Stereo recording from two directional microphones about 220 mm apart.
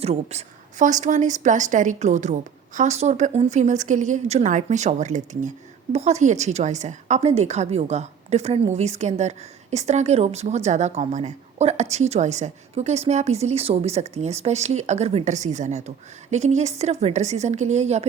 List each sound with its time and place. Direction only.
0.0 s speech: 30° right (ahead or behind)